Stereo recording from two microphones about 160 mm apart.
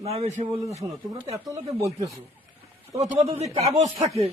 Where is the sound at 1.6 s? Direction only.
20° right (ahead or behind).